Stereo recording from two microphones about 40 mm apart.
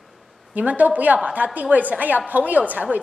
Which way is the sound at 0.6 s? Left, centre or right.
Right.